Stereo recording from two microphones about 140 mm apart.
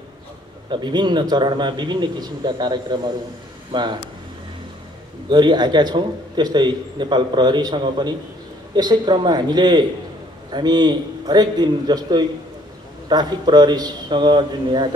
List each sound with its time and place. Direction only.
0.7 s a man's voice: 30° right (ahead or behind)
5.3 s a man's voice: 30° right (ahead or behind)